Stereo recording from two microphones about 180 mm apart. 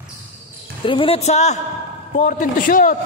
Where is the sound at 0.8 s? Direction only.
30° left (ahead or behind); by 3.0 s 50° left (ahead or behind).